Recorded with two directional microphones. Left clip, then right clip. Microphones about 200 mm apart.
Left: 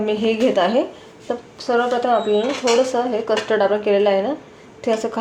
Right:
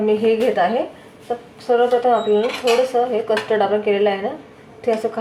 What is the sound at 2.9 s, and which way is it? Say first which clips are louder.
Speech: right 1 dB; 40° left (ahead or behind).